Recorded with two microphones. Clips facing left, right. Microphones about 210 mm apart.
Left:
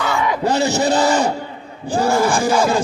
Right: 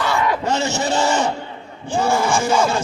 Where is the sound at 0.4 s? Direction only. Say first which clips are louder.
Left 4 dB; 35° left (ahead or behind).